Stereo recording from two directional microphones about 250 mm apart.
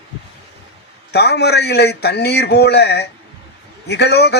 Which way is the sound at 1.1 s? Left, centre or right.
Left.